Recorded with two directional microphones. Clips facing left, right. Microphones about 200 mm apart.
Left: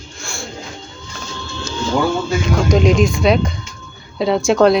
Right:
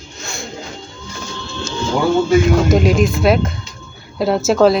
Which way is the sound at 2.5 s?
5° right (ahead or behind).